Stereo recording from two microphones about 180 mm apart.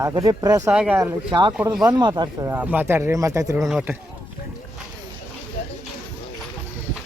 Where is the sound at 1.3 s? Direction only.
25° right (ahead or behind).